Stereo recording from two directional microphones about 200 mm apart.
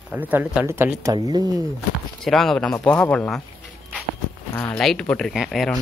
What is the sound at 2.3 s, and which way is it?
Speech, centre (ahead or behind).